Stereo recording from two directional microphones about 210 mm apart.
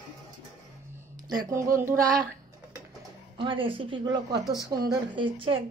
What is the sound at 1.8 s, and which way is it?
Child singing, 10° right (ahead or behind).